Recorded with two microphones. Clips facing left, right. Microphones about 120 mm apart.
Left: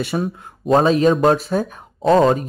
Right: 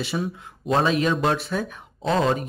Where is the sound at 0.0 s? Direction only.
50° left (ahead or behind).